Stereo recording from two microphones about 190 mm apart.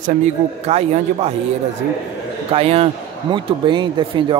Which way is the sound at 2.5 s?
30° right (ahead or behind).